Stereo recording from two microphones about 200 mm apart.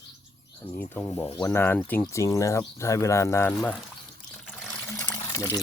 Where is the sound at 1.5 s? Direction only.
10° left (ahead or behind).